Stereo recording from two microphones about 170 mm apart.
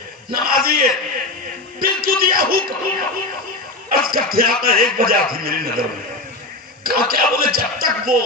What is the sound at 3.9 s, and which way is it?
A man's voice, 60° right (ahead or behind).